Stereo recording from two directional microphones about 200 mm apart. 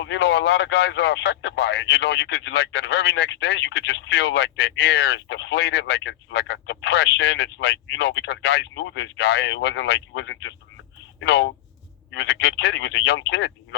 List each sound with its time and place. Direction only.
0.0 s speech: 60° left (ahead or behind)